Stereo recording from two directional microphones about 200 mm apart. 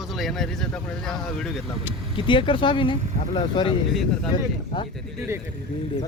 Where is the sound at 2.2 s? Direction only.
25° left (ahead or behind).